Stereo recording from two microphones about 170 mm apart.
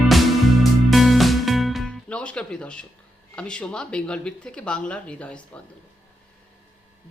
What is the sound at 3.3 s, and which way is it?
Speech, 5° left (ahead or behind).